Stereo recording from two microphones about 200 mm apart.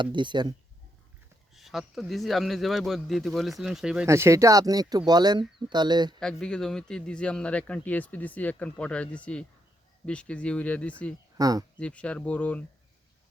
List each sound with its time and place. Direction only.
0.0 s speech: 25° right (ahead or behind)
1.5 s speech: centre (ahead or behind); by 6.1 s 20° right (ahead or behind)
6.1 s speech: 5° left (ahead or behind)
11.3 s speech: 20° right (ahead or behind)
11.8 s speech: 5° left (ahead or behind)